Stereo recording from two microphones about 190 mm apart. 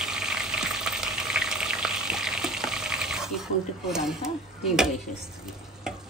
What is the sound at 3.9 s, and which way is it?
Speech, 5° right (ahead or behind).